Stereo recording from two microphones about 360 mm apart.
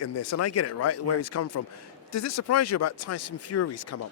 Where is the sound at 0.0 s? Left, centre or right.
Left.